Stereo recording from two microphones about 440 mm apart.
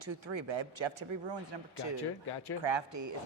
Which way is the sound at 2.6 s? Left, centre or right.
Right.